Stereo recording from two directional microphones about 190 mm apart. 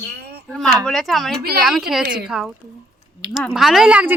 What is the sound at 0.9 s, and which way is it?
Speech, centre (ahead or behind).